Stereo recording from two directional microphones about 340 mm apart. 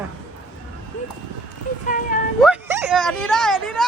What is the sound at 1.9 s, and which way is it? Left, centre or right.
Speech, left.